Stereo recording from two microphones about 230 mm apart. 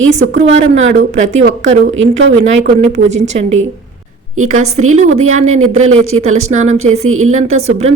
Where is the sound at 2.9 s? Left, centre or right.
Right.